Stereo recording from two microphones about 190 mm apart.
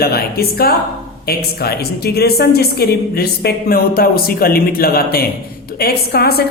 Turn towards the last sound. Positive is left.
turn(degrees=55)  # may be behind; listen again after turning